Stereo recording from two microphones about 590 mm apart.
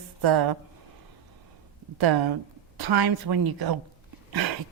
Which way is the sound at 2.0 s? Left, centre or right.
Right.